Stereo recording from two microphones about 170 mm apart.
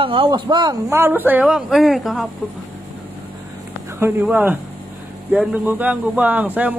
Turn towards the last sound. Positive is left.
turn(degrees=-10)  # may be behind; listen again after turning